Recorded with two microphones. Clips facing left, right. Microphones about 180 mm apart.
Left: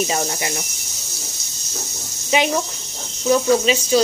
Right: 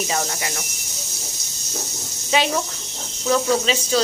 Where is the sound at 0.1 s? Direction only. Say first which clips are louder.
Left 2 dB; 20° left (ahead or behind).